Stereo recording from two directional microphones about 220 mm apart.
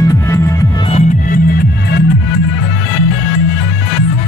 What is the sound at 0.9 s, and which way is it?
Music, 40° left (ahead or behind).